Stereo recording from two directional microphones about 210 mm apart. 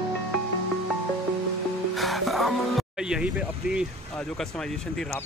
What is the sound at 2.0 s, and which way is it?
Music, centre (ahead or behind).